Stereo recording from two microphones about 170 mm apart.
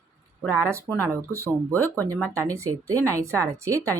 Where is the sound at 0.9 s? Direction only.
5° right (ahead or behind).